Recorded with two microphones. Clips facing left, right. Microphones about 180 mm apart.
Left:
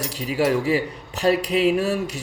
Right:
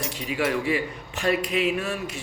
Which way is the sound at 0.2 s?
35° left (ahead or behind).